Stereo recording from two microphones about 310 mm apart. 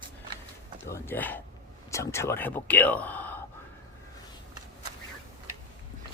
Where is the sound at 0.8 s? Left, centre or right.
Centre.